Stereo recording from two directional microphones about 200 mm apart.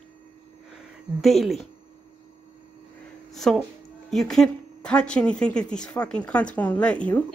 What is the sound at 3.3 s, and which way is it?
Speech, centre (ahead or behind).